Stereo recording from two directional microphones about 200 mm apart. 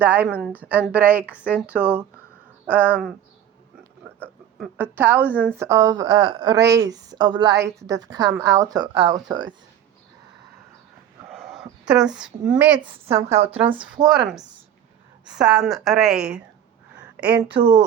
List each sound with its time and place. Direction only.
0.0 s a woman's voice: 10° right (ahead or behind)
4.8 s a woman's voice: 10° right (ahead or behind)
11.3 s a sound: centre (ahead or behind)
11.9 s a woman's voice: 5° right (ahead or behind)
13.1 s a woman's voice: 35° right (ahead or behind)
14.1 s a woman's voice: centre (ahead or behind)
17.6 s speech: 25° right (ahead or behind)